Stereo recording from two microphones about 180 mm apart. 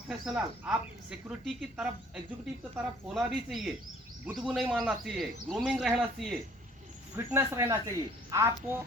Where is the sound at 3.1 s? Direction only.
Centre (ahead or behind).